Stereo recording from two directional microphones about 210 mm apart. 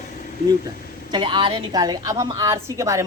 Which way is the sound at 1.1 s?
25° right (ahead or behind).